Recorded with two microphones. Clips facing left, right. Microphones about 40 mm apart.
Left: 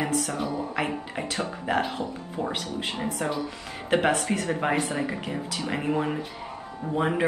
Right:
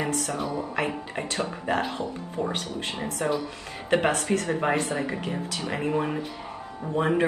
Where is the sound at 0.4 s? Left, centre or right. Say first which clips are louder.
Even; centre.